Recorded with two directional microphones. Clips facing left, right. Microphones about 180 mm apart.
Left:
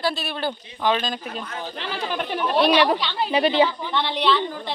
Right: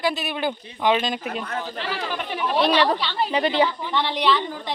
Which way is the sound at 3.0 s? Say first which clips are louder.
Right 1 dB; 5° right (ahead or behind).